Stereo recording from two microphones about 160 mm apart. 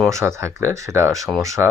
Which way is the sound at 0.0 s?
20° right (ahead or behind).